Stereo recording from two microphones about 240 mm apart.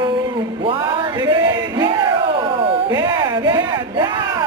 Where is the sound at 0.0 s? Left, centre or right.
Centre.